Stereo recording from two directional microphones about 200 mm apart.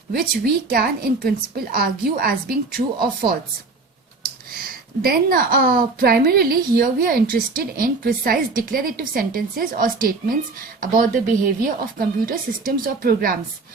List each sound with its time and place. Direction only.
0.7 s a woman's voice: 50° right (ahead or behind)
4.5 s a woman's voice: 45° right (ahead or behind)